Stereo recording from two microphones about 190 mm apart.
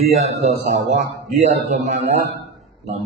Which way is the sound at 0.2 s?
35° right (ahead or behind).